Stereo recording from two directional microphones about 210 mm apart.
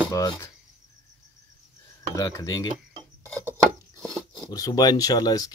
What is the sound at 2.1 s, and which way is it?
Speech, 15° left (ahead or behind).